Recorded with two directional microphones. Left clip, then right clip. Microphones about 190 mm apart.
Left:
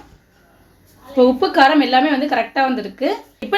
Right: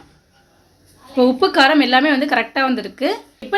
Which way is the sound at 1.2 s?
15° right (ahead or behind).